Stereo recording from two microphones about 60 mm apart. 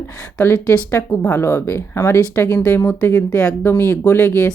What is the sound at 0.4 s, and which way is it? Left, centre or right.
Speech, left.